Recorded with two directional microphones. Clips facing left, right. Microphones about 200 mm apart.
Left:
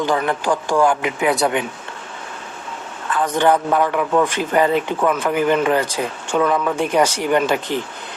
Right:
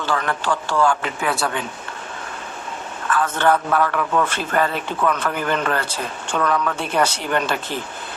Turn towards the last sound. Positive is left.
turn(degrees=15)  # may be behind; listen again after turning